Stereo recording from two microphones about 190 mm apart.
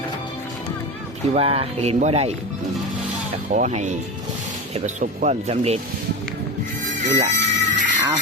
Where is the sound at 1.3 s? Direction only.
30° right (ahead or behind).